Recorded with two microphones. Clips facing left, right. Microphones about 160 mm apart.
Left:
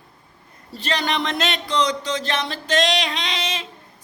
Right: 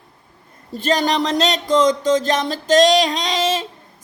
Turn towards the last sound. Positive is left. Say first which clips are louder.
# right 8 dB
turn(degrees=-40)  # may be behind; listen again after turning